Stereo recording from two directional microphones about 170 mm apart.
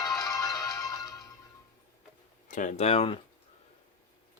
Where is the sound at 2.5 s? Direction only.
50° left (ahead or behind).